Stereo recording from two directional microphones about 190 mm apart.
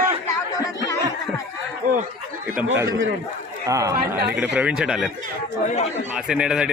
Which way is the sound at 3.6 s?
15° right (ahead or behind).